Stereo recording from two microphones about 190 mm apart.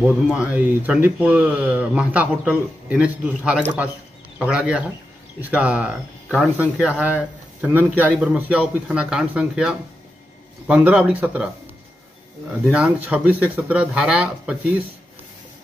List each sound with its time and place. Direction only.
0.0 s speech: 5° right (ahead or behind)
12.7 s speech: 5° right (ahead or behind)